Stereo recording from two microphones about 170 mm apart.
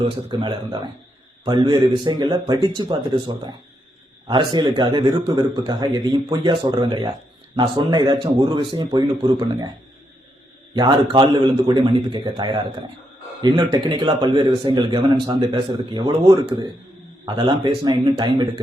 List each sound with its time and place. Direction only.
0.0 s a man's voice: 30° right (ahead or behind)
10.8 s a man's voice: 25° right (ahead or behind)